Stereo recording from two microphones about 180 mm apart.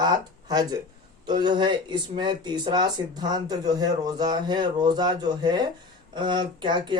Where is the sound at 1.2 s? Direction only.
25° right (ahead or behind).